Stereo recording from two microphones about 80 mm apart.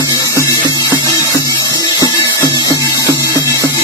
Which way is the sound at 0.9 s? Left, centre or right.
Left.